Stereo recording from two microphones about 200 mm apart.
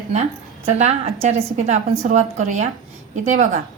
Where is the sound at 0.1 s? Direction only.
35° right (ahead or behind).